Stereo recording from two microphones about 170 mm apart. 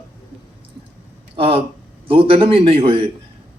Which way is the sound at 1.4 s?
35° right (ahead or behind).